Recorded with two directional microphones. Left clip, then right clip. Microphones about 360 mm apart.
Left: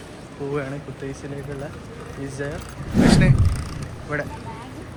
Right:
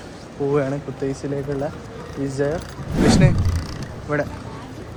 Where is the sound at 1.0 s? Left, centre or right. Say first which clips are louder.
Right 8 dB; centre.